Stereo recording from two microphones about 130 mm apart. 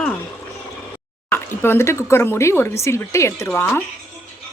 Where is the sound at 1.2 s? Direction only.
15° left (ahead or behind).